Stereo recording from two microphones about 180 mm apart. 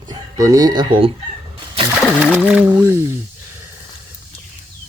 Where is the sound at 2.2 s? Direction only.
5° right (ahead or behind).